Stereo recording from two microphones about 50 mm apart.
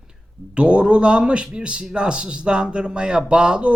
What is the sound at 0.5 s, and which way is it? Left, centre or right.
A man's voice, right.